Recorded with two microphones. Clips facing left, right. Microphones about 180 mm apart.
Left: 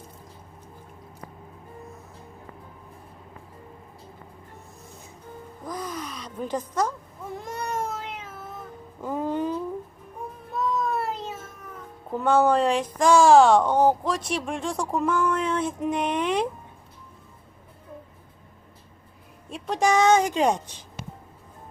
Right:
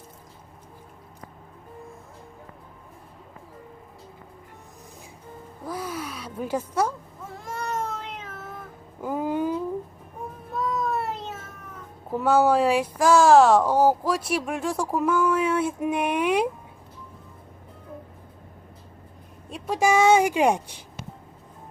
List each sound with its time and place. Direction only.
5.6 s gasp: 5° right (ahead or behind)
7.4 s cat: 15° left (ahead or behind)
9.0 s a sound: 5° right (ahead or behind)
12.2 s speech: 5° right (ahead or behind)
19.5 s a woman's voice: centre (ahead or behind)